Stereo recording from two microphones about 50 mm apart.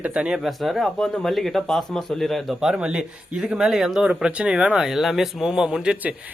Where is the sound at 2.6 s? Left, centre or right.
Centre.